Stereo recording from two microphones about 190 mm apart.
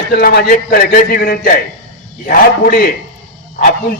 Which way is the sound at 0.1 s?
50° left (ahead or behind).